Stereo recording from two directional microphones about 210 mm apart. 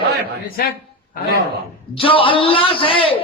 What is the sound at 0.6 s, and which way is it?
Speech, 45° left (ahead or behind).